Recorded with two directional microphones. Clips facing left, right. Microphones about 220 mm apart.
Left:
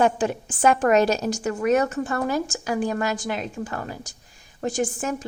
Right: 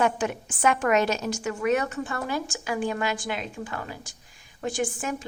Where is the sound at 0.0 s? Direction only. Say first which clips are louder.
Left 4 dB; 30° left (ahead or behind).